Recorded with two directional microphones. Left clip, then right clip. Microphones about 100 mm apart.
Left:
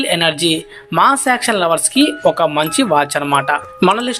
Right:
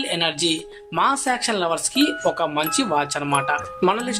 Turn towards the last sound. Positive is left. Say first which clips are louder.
# left 7 dB
turn(degrees=35)  # may be behind; listen again after turning